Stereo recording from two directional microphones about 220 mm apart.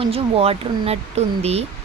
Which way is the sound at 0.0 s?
25° right (ahead or behind).